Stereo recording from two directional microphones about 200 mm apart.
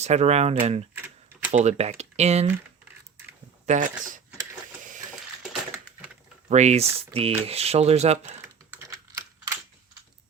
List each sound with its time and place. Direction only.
0.0 s speech: 35° right (ahead or behind)
3.7 s speech: 40° right (ahead or behind)
6.5 s speech: 35° right (ahead or behind)
8.4 s typing: 15° right (ahead or behind)